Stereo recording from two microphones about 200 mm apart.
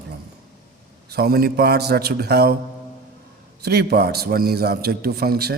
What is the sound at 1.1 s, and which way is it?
Speech, 50° right (ahead or behind).